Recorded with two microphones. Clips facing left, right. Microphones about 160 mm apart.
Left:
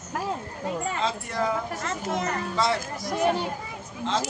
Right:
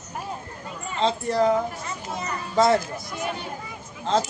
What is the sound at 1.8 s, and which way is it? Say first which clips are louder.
Speech: left 4 dB; 90° left.